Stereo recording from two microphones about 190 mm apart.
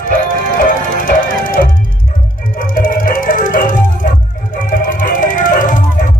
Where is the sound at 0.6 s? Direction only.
45° left (ahead or behind).